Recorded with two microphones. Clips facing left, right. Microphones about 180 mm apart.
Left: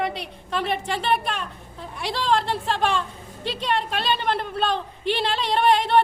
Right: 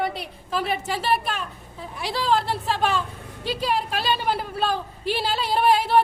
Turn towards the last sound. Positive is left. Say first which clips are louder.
# even
turn(degrees=-5)  # may be behind; listen again after turning